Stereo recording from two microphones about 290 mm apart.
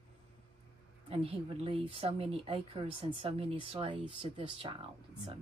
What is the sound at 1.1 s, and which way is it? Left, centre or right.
A woman's voice, centre.